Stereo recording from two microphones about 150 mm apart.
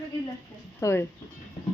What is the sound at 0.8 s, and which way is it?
Speech, 20° left (ahead or behind).